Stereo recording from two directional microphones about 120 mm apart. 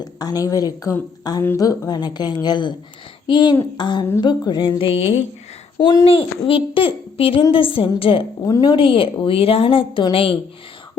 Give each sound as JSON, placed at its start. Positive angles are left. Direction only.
{"t": 0.0, "sound": "speech", "side_deg": 30}
{"t": 5.7, "sound": "a child's voice", "side_deg": 35}
{"t": 6.1, "sound": "a child's voice", "side_deg": 50}